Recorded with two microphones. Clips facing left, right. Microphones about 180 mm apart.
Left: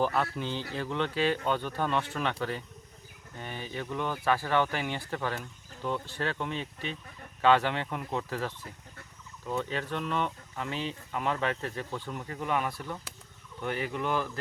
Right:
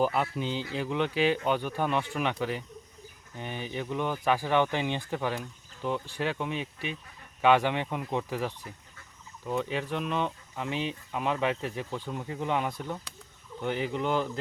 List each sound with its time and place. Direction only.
0.0 s speech: 10° right (ahead or behind)